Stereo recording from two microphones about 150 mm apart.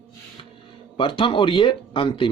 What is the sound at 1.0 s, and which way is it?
Speech, 35° left (ahead or behind).